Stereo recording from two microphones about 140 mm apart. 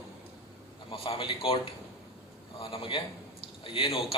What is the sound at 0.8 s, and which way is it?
A man's voice, 40° left (ahead or behind).